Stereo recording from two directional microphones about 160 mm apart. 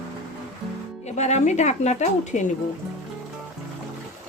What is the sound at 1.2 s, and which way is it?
A woman's voice, 45° left (ahead or behind).